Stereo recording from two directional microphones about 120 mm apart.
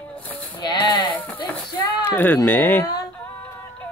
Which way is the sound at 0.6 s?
40° left (ahead or behind).